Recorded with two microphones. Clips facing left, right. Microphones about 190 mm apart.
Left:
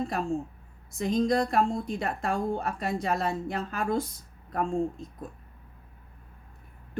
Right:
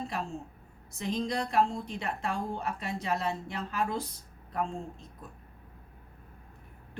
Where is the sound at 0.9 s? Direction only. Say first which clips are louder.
Left 7 dB; 45° left (ahead or behind).